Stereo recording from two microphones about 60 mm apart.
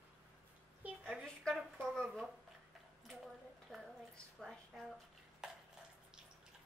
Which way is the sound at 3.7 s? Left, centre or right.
Centre.